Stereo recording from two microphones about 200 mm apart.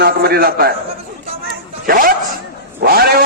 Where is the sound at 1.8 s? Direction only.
45° right (ahead or behind).